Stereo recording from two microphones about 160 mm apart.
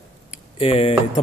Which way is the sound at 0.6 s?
35° left (ahead or behind).